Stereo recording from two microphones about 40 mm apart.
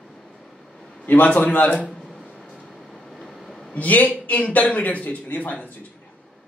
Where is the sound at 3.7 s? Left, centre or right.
Left.